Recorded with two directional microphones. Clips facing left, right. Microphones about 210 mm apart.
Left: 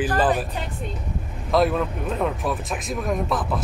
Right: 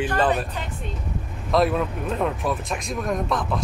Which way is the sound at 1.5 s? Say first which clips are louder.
Even; centre (ahead or behind).